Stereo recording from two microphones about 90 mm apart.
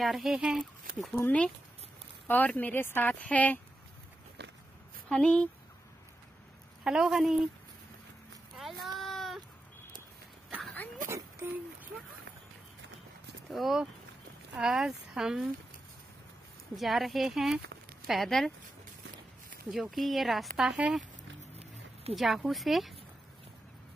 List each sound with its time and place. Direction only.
0.0 s speech: centre (ahead or behind)
1.1 s speech: 15° left (ahead or behind)
5.1 s speech: 10° left (ahead or behind)
6.8 s a woman's voice: 5° right (ahead or behind)
8.5 s a sound: centre (ahead or behind)
11.1 s a sound: 30° right (ahead or behind)
13.5 s speech: centre (ahead or behind)
16.7 s speech: centre (ahead or behind)
19.7 s speech: centre (ahead or behind)
22.1 s speech: centre (ahead or behind)